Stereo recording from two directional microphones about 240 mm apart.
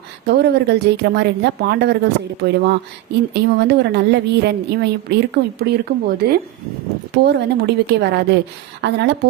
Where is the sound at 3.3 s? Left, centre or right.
Right.